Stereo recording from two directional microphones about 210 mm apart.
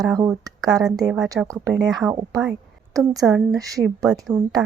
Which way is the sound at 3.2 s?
Centre (ahead or behind).